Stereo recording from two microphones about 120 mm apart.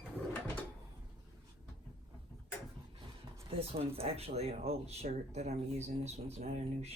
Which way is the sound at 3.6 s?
55° right (ahead or behind).